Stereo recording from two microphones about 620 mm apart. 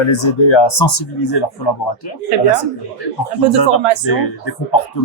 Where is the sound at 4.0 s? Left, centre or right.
Left.